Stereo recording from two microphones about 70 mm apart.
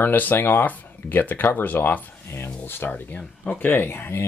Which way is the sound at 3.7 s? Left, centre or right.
Left.